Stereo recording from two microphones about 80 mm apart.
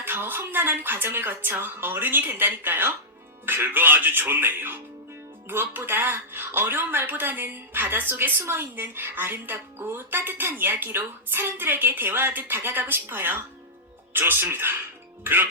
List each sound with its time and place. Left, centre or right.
0.0 s speech: right